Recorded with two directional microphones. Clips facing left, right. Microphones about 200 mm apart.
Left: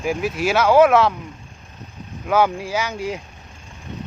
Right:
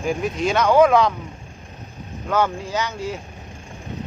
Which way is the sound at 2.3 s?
10° left (ahead or behind).